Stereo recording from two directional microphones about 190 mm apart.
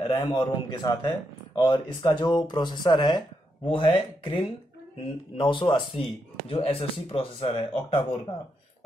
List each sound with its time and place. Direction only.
0.1 s a man's voice: 20° left (ahead or behind)